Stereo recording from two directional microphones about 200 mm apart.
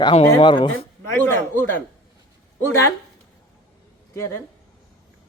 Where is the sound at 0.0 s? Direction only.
25° left (ahead or behind).